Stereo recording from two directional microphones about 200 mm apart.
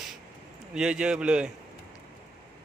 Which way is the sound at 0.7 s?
5° right (ahead or behind).